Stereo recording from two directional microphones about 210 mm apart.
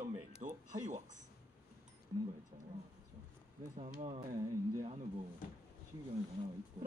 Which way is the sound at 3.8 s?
30° right (ahead or behind).